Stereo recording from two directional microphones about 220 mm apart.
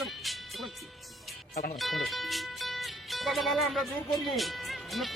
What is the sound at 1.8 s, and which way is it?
Speech, centre (ahead or behind).